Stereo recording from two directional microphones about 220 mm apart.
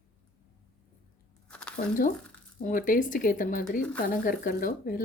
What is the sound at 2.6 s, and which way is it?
Speech, 40° left (ahead or behind).